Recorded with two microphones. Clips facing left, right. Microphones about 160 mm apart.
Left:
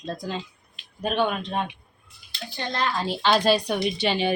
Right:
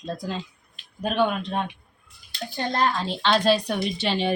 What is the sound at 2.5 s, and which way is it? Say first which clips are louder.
Speech: right 3 dB; 45° right (ahead or behind).